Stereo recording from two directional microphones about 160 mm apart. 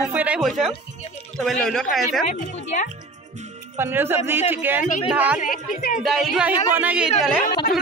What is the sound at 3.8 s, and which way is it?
Speech, 15° right (ahead or behind).